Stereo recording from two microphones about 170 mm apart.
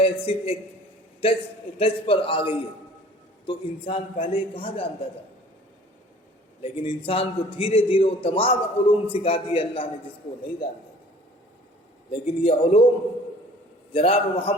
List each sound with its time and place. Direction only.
0.0 s a man's voice: 35° left (ahead or behind)
6.6 s a man's voice: 35° left (ahead or behind)
12.2 s a man's voice: 35° left (ahead or behind)
13.9 s a man's voice: 35° left (ahead or behind)